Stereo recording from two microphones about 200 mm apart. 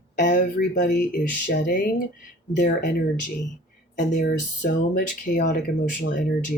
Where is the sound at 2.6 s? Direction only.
40° left (ahead or behind).